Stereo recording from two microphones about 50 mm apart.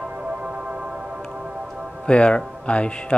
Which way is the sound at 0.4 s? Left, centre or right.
Right.